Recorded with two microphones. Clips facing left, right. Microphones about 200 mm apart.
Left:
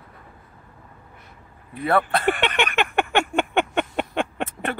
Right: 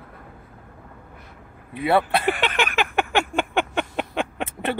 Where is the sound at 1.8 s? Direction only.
10° right (ahead or behind).